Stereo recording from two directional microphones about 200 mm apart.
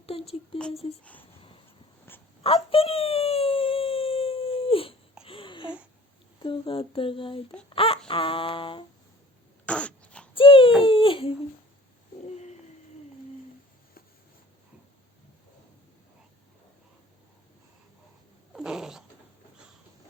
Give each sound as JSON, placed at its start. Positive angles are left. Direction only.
{"t": 0.0, "sound": "a sound", "side_deg": 30}
{"t": 1.0, "sound": "speech", "side_deg": 10}
{"t": 2.4, "sound": "whimper", "side_deg": 30}
{"t": 5.2, "sound": "babbling", "side_deg": 25}
{"t": 6.4, "sound": "a sound", "side_deg": 25}
{"t": 9.6, "sound": "throat clearing", "side_deg": 5}
{"t": 10.3, "sound": "baby cry", "side_deg": 25}
{"t": 10.8, "sound": "speech", "side_deg": 25}
{"t": 18.5, "sound": "cat", "side_deg": -5}